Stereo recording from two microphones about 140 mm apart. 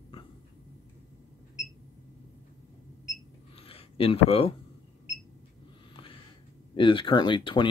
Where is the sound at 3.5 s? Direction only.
45° left (ahead or behind).